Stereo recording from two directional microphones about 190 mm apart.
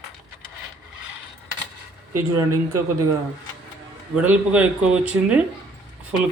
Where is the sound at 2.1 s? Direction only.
15° right (ahead or behind).